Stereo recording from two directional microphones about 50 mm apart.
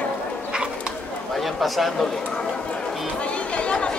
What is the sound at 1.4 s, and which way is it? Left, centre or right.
Speech, centre.